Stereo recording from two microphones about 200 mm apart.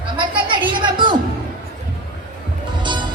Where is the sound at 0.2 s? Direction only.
25° right (ahead or behind).